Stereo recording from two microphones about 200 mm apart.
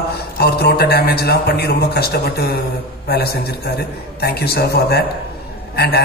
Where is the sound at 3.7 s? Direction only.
55° left (ahead or behind).